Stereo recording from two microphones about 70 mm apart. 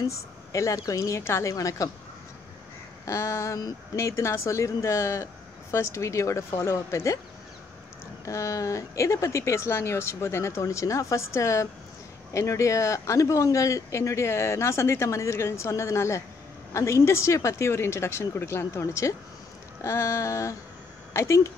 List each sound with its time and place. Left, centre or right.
0.0 s speech: left
3.1 s speech: left
8.3 s a woman's voice: left